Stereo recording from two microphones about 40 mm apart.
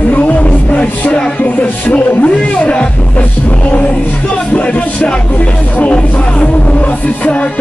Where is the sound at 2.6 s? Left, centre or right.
Left.